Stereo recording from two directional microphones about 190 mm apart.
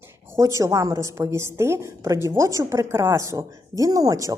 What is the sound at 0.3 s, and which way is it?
A woman's voice, 15° right (ahead or behind).